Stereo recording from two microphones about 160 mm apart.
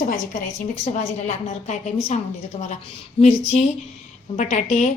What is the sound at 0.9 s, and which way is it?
A woman's voice, 50° left (ahead or behind).